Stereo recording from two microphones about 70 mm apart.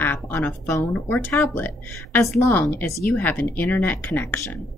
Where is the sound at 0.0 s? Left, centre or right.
Left.